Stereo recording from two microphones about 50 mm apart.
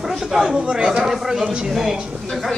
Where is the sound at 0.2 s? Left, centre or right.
Centre.